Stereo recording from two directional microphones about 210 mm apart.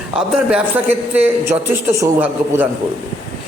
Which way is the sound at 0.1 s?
5° right (ahead or behind).